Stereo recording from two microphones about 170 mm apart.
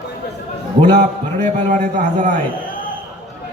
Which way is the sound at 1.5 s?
45° right (ahead or behind).